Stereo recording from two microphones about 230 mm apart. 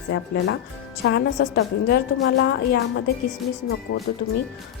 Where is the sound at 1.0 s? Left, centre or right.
Left.